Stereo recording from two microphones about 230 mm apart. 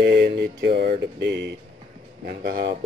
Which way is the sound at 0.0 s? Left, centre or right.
Right.